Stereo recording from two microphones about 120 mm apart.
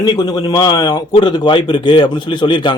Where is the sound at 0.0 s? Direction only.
35° left (ahead or behind).